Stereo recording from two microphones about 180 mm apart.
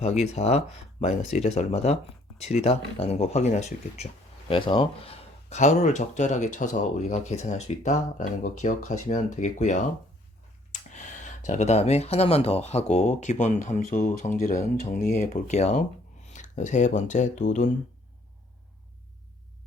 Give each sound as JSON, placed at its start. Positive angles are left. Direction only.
{"t": 0.0, "sound": "speech", "side_deg": 35}